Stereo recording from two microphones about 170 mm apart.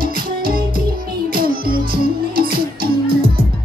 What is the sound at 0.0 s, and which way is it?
Music, 60° right (ahead or behind).